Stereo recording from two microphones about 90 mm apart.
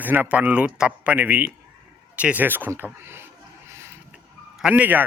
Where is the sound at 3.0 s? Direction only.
25° right (ahead or behind).